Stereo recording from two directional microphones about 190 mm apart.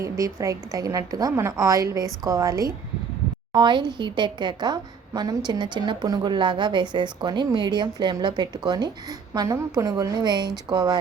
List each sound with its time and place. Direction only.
0.0 s a woman's voice: 15° right (ahead or behind)